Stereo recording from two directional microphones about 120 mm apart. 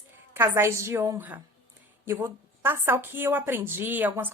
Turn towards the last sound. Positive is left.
turn(degrees=-15)  # may be behind; listen again after turning